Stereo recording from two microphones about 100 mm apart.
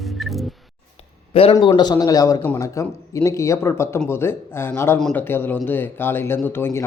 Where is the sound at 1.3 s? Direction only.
75° left (ahead or behind).